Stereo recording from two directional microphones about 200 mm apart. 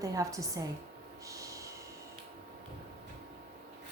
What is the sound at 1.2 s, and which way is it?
Snort, 15° right (ahead or behind).